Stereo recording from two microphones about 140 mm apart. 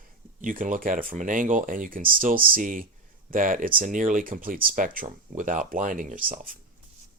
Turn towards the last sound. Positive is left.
turn(degrees=-85)